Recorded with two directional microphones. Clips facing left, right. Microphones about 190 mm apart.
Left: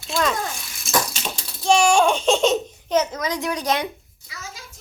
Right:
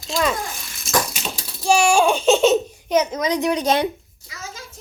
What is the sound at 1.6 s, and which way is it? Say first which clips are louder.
Baby laughter: even; 10° right (ahead or behind).